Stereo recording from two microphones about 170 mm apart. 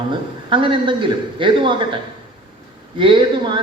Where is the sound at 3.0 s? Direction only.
30° right (ahead or behind).